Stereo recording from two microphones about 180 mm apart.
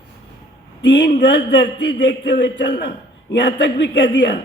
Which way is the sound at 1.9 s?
70° left (ahead or behind).